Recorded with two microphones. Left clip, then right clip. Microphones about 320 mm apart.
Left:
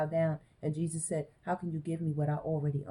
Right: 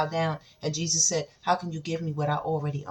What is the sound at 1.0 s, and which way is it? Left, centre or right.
Speech, centre.